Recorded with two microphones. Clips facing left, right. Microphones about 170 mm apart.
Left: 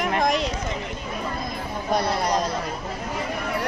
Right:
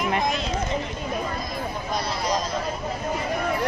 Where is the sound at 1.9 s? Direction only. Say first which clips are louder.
Left 5 dB; 60° left (ahead or behind).